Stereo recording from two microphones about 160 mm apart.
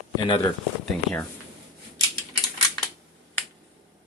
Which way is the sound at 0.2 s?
30° left (ahead or behind).